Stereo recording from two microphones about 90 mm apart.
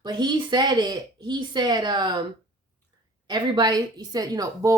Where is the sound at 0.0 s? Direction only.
55° right (ahead or behind).